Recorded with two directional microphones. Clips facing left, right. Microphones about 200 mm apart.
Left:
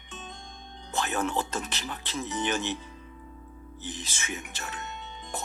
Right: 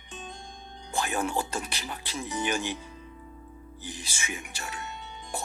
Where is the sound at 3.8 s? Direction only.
10° right (ahead or behind).